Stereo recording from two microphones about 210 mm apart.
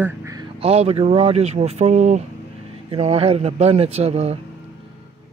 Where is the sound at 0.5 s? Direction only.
30° right (ahead or behind).